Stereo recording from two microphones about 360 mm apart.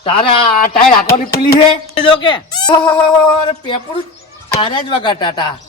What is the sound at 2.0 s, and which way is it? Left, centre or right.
Speech, centre.